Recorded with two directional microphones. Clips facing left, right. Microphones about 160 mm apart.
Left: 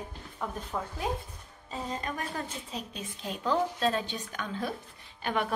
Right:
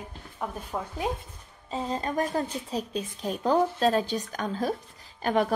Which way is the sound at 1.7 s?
30° right (ahead or behind).